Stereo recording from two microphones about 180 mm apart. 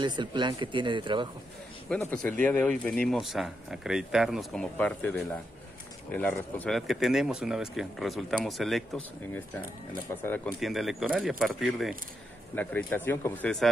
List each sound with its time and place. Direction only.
0.0 s speech: 25° right (ahead or behind)
1.9 s speech: 10° left (ahead or behind)
10.6 s speech: centre (ahead or behind)
12.5 s speech: 10° left (ahead or behind)